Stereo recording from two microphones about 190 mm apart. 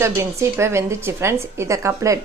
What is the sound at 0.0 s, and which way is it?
Speech, 15° right (ahead or behind).